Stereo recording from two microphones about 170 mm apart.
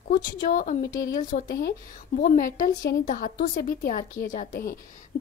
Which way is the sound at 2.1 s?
50° left (ahead or behind).